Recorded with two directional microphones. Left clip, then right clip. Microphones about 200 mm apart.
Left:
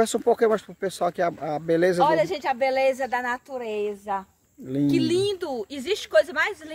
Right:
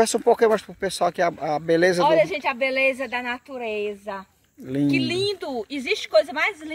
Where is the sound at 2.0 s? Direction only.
15° left (ahead or behind).